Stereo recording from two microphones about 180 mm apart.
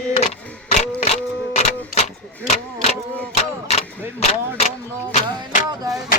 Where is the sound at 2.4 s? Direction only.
35° left (ahead or behind).